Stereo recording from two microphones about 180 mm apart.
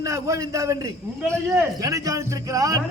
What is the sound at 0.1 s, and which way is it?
Speech, 15° right (ahead or behind).